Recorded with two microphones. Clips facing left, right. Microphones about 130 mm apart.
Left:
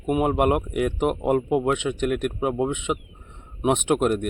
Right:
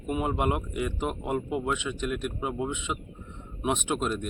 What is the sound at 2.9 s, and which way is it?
Speech, 50° left (ahead or behind).